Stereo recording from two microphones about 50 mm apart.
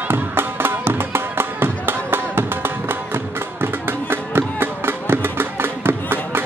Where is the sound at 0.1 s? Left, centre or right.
Right.